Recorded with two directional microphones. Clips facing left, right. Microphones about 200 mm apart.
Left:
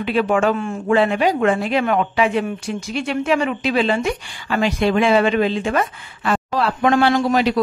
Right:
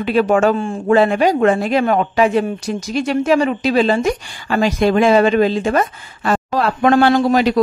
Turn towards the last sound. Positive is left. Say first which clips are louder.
# right 3 dB
turn(degrees=-40)  # may be behind; listen again after turning